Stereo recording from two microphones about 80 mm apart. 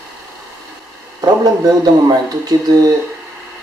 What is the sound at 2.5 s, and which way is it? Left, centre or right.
Speech, right.